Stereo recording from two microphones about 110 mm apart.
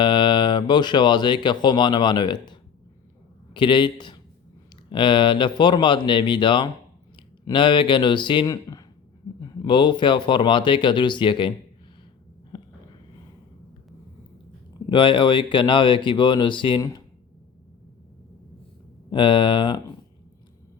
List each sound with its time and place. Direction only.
0.0 s a man's voice: 45° left (ahead or behind)
8.7 s a sound: 35° left (ahead or behind)
9.4 s speech: 35° left (ahead or behind)
14.8 s speech: 50° left (ahead or behind)
19.1 s speech: 50° left (ahead or behind)